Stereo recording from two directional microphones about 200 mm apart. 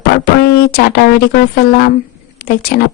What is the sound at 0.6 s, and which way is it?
Speech, 50° left (ahead or behind).